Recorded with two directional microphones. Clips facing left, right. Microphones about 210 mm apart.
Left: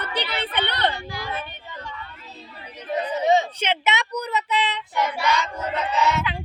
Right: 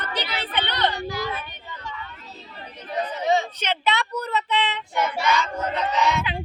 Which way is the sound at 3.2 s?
25° left (ahead or behind).